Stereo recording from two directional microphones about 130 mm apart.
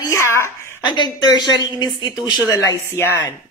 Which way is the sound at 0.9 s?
35° left (ahead or behind).